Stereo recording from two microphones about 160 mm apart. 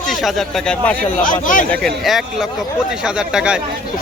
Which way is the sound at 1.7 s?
Centre (ahead or behind).